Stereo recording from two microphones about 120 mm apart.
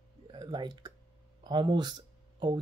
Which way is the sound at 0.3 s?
40° right (ahead or behind).